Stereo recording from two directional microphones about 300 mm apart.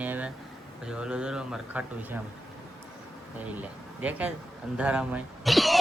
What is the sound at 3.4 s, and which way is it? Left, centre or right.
Speech, centre.